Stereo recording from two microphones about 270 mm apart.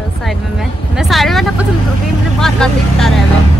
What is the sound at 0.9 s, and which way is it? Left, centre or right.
Speech, centre.